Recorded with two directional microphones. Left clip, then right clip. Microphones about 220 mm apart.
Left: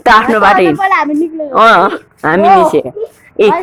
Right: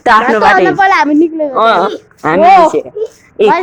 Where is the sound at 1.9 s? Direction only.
10° left (ahead or behind).